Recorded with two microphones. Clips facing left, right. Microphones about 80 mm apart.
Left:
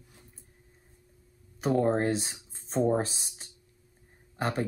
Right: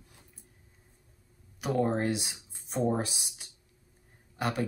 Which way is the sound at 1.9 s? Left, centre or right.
Left.